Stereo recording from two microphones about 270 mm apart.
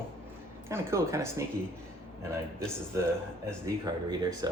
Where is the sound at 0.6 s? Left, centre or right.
Centre.